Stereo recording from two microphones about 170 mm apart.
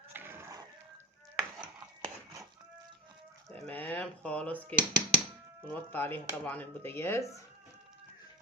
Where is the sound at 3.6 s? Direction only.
10° left (ahead or behind).